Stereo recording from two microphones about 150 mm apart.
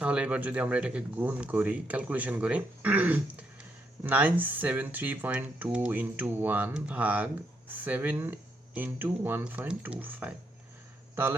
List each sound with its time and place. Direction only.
0.0 s speech: 10° right (ahead or behind)